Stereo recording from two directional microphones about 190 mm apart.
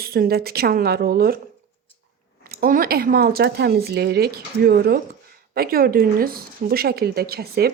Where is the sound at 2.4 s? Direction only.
50° right (ahead or behind).